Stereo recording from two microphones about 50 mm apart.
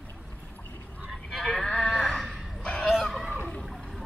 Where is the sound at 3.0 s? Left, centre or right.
Centre.